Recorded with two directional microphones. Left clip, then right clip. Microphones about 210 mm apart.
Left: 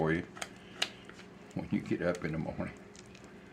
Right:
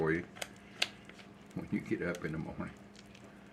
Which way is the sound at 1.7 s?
35° left (ahead or behind).